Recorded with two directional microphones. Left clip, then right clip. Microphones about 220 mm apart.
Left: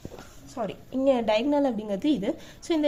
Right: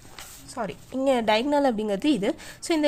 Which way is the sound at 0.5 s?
35° right (ahead or behind).